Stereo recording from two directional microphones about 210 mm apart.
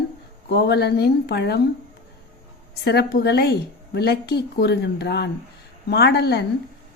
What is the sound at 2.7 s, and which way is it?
A woman's voice, 50° left (ahead or behind).